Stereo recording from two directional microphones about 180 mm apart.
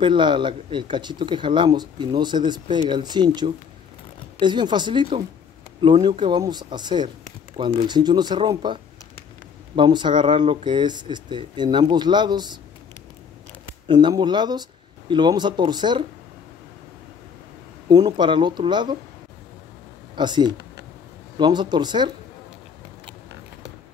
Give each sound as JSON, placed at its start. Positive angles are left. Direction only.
{"t": 0.0, "sound": "speech", "side_deg": -25}
{"t": 9.8, "sound": "speech", "side_deg": -25}
{"t": 13.8, "sound": "speech", "side_deg": -25}
{"t": 17.8, "sound": "speech", "side_deg": -20}
{"t": 20.2, "sound": "speech", "side_deg": -25}